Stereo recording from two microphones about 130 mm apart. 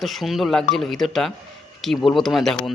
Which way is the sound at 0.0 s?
Centre (ahead or behind).